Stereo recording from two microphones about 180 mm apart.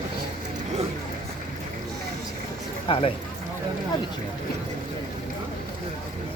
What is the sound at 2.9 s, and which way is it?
Speech, 30° left (ahead or behind).